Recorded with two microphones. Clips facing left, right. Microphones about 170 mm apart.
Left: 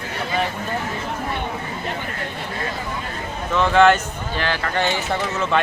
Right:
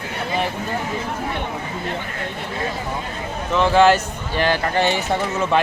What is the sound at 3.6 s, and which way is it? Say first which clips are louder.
A man's voice: right 1 dB; 5° right (ahead or behind).